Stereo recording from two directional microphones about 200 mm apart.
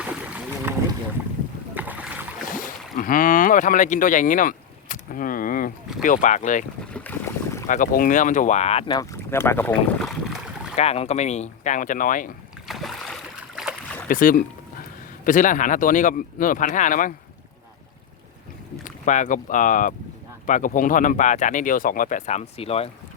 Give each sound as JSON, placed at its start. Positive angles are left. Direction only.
{"t": 0.0, "sound": "boat", "side_deg": -5}
{"t": 1.7, "sound": "boat", "side_deg": -10}
{"t": 2.5, "sound": "speech", "side_deg": 45}
{"t": 6.9, "sound": "boat", "side_deg": 10}
{"t": 7.7, "sound": "speech", "side_deg": 40}
{"t": 9.0, "sound": "speech", "side_deg": 10}
{"t": 10.8, "sound": "speech", "side_deg": 30}
{"t": 12.6, "sound": "boat", "side_deg": 0}
{"t": 14.1, "sound": "speech", "side_deg": 45}
{"t": 18.9, "sound": "speech", "side_deg": 40}